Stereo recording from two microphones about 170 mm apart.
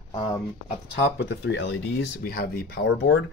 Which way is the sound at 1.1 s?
90° left.